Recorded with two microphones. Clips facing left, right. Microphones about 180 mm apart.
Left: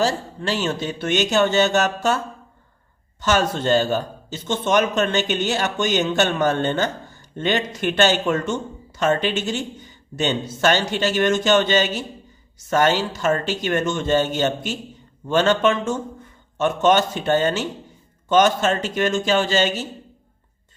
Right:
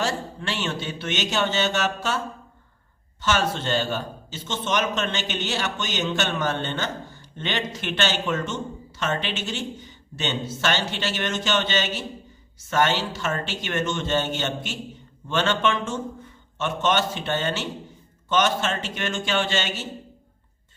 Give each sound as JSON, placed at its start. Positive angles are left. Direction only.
{"t": 0.0, "sound": "a man's voice", "side_deg": 40}
{"t": 3.2, "sound": "a man's voice", "side_deg": 45}